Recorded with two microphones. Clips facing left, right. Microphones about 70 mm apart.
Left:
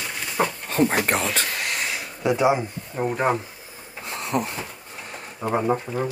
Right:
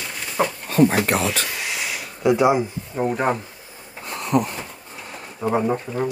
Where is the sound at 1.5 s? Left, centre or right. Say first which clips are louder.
Even; centre.